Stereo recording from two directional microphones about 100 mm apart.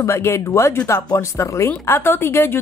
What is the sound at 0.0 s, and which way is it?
Speech, 25° left (ahead or behind).